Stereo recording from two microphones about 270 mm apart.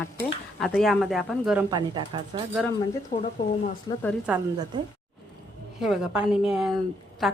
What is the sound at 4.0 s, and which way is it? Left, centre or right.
Speech, centre.